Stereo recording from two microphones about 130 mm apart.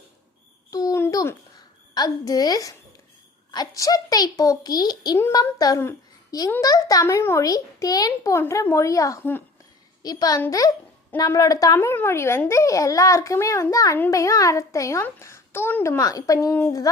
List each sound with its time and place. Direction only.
0.7 s a sound: 30° left (ahead or behind)
2.0 s a child's voice: 30° left (ahead or behind)
10.0 s a child's voice: 30° left (ahead or behind)
16.5 s speech: 15° left (ahead or behind)